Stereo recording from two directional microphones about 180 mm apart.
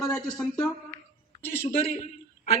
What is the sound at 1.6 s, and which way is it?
Speech, 35° left (ahead or behind).